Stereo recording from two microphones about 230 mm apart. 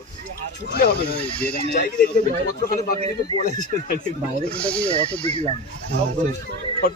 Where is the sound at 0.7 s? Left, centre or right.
Left.